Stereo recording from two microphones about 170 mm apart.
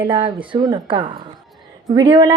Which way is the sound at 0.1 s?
30° right (ahead or behind).